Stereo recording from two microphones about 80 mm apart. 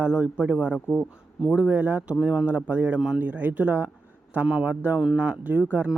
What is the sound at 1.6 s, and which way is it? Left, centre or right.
A man's voice, right.